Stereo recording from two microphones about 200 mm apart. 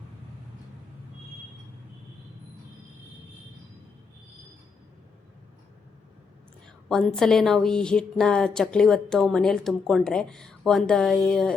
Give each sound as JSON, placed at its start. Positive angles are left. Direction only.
{"t": 6.8, "sound": "a woman's voice", "side_deg": 0}